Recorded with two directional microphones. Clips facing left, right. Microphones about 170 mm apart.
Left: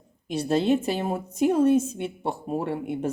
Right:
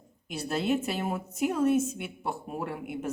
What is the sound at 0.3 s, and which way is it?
A woman's voice, 30° left (ahead or behind).